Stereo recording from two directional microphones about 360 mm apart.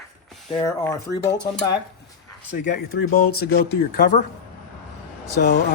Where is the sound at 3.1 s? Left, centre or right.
Left.